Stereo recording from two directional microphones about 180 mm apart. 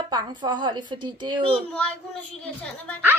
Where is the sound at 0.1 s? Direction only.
25° right (ahead or behind).